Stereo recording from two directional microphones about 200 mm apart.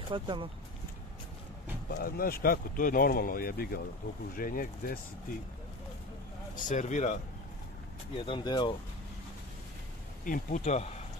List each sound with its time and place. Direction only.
0.1 s speech: 25° right (ahead or behind)
1.9 s speech: 50° left (ahead or behind)
6.5 s speech: 40° left (ahead or behind)
8.2 s speech: 25° left (ahead or behind)
10.2 s speech: 40° left (ahead or behind)